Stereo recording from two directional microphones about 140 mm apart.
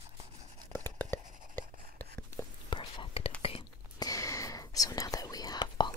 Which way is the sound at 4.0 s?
25° left (ahead or behind).